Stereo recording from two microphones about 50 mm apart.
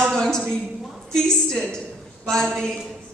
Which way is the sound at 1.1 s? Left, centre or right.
Centre.